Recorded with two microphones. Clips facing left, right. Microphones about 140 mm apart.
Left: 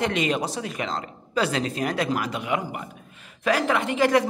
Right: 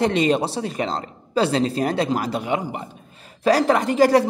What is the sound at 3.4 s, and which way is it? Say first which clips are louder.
Speech: right 5 dB; 40° right (ahead or behind).